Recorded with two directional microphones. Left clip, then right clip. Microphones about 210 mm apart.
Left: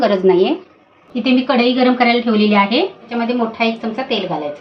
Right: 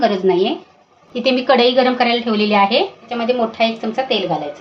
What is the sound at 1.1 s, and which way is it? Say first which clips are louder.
Speech: right 2 dB; 35° right (ahead or behind).